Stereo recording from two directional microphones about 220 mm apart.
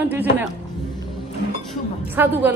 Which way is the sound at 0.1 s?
10° right (ahead or behind).